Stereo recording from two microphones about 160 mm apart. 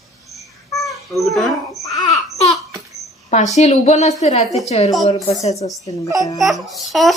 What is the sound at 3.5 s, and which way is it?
A woman's voice, 50° left (ahead or behind).